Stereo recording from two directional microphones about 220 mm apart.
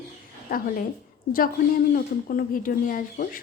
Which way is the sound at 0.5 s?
40° left (ahead or behind).